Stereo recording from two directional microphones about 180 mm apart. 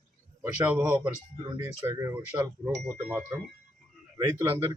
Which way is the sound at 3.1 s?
10° right (ahead or behind).